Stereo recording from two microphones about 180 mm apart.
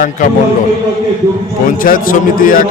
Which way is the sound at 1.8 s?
50° left (ahead or behind).